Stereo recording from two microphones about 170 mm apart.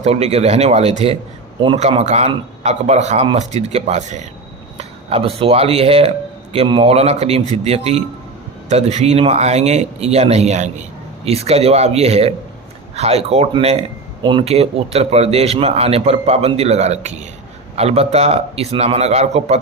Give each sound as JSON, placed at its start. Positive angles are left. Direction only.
{"t": 0.0, "sound": "speech", "side_deg": -40}